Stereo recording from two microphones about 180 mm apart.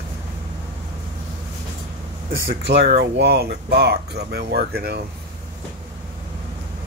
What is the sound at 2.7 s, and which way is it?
Speech, 70° right (ahead or behind).